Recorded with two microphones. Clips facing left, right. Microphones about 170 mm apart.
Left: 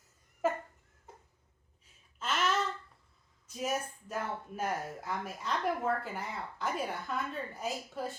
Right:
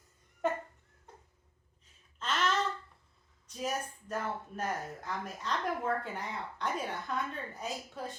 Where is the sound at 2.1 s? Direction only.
5° left (ahead or behind).